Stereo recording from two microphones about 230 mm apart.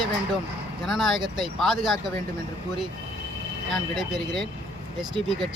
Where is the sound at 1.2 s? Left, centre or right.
Centre.